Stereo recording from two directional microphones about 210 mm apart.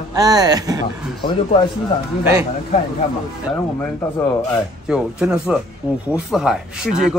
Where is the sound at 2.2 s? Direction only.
10° right (ahead or behind).